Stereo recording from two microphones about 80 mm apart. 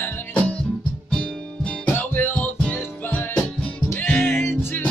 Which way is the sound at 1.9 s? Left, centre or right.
Left.